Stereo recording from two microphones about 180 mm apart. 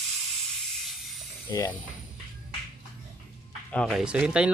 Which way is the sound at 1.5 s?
20° left (ahead or behind).